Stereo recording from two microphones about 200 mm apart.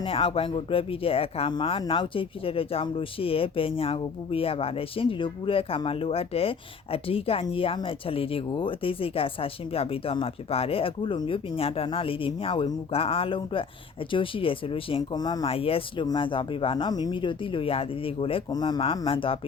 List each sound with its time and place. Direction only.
0.0 s speech: 25° left (ahead or behind)